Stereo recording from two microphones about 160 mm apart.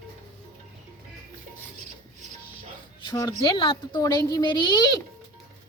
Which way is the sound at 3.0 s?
20° left (ahead or behind).